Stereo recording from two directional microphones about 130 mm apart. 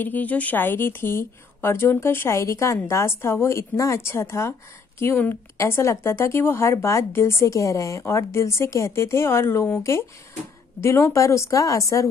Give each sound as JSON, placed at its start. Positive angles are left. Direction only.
{"t": 0.0, "sound": "a woman's voice", "side_deg": 10}